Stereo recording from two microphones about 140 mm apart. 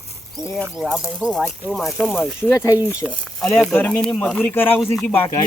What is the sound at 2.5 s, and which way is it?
Speech, 25° left (ahead or behind).